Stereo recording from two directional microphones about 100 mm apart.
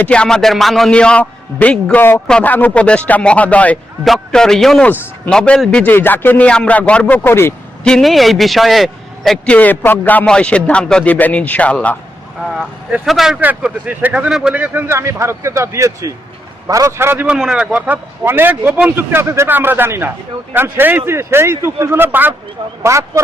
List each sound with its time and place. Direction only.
0.0 s speech: 10° left (ahead or behind)
4.0 s a man's voice: 5° left (ahead or behind); by 7.5 s 20° left (ahead or behind)
7.9 s a man's voice: 5° left (ahead or behind)
9.5 s speech: 15° left (ahead or behind)
13.1 s a man's voice: 5° right (ahead or behind)
13.4 s a man's voice: 15° right (ahead or behind)
17.3 s a man's voice: 5° right (ahead or behind); by 23.2 s 30° right (ahead or behind)